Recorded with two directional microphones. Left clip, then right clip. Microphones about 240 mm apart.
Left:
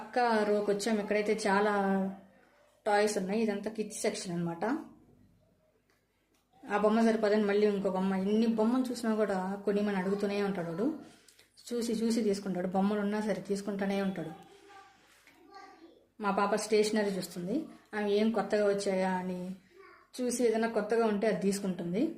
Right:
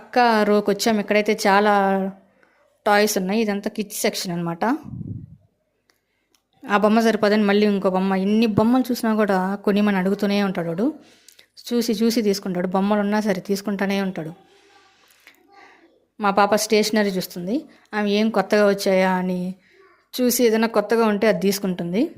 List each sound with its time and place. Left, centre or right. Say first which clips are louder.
0.1 s a man's voice: right 11 dB; right
6.7 s a man's voice: right 10 dB; right
16.1 s a man's voice: right 12 dB; right